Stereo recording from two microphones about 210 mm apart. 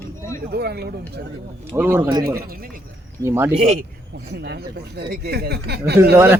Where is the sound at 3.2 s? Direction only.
10° right (ahead or behind).